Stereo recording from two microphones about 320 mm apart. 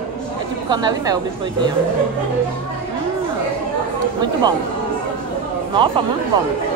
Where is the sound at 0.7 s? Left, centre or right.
Centre.